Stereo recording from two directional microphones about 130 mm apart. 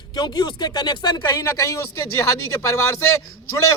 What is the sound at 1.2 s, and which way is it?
Speech, 20° left (ahead or behind).